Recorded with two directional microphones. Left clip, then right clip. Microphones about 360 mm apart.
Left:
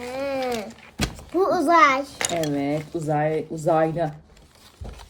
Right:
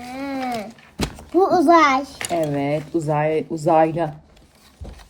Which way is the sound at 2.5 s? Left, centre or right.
Right.